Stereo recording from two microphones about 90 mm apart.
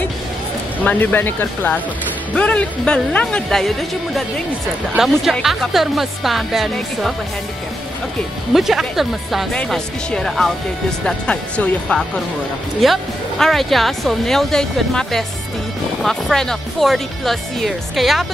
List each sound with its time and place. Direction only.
0.8 s speech: 20° left (ahead or behind); by 7.2 s centre (ahead or behind)
8.5 s speech: 5° right (ahead or behind)
9.5 s speech: 10° left (ahead or behind)
12.8 s speech: centre (ahead or behind)